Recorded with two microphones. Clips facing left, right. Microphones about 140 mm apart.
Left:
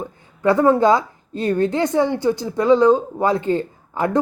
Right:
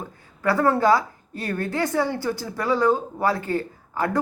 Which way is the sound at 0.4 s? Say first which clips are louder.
Left 5 dB; 20° left (ahead or behind).